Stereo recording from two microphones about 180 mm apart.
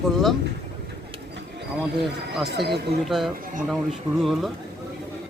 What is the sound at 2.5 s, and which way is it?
Speech, 65° right (ahead or behind).